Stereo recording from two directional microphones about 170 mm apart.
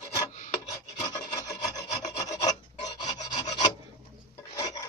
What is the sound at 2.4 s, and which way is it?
Filing, 25° left (ahead or behind).